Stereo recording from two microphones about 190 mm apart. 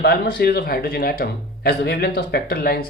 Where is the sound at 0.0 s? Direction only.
55° left (ahead or behind).